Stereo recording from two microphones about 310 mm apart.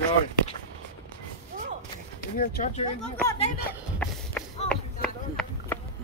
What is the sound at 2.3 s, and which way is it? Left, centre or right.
Speech, left.